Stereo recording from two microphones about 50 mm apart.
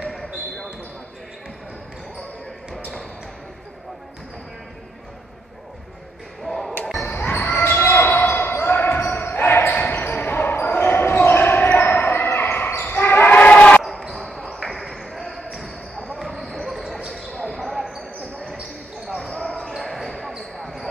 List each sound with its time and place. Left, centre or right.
0.1 s basketball bounce: centre
6.4 s basketball bounce: centre
7.1 s basketball bounce: left
7.5 s basketball bounce: left
7.9 s basketball bounce: left
8.2 s basketball bounce: left
13.8 s basketball bounce: centre
16.6 s basketball bounce: centre
17.1 s basketball bounce: left
17.6 s basketball bounce: centre
19.2 s basketball bounce: centre
19.8 s basketball bounce: centre